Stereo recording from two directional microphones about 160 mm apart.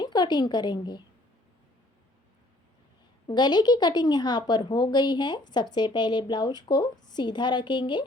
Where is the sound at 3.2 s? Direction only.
25° left (ahead or behind).